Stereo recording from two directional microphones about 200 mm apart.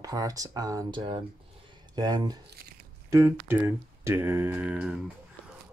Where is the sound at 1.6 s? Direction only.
20° right (ahead or behind).